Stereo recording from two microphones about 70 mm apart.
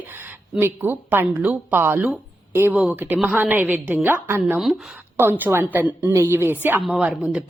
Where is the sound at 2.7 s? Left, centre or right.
Centre.